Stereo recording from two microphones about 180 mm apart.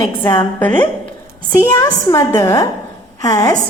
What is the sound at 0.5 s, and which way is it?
A woman's voice, 10° left (ahead or behind).